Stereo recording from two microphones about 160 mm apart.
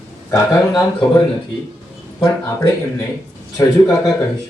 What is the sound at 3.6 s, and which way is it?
Speech, 15° left (ahead or behind).